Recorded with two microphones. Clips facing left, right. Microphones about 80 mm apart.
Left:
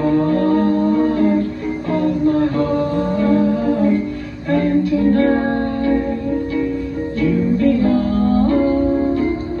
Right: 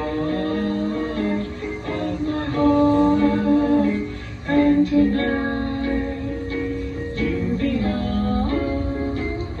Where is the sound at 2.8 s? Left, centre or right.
Right.